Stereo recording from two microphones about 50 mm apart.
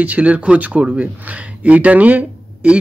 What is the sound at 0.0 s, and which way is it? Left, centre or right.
Speech, right.